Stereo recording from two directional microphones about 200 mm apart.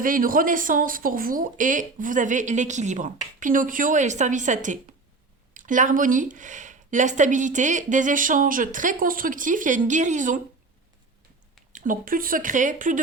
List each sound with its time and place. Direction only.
0.0 s speech: 45° right (ahead or behind)
11.7 s speech: 40° right (ahead or behind)